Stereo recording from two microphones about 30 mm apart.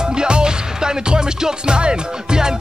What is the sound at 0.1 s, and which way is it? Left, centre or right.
Music, right.